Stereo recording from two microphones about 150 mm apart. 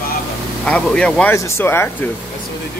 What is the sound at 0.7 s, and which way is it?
Speech, 5° left (ahead or behind).